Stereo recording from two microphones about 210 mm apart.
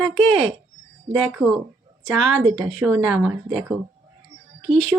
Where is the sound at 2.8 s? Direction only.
5° right (ahead or behind).